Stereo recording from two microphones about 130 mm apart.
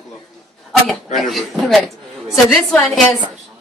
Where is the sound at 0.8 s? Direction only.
5° left (ahead or behind).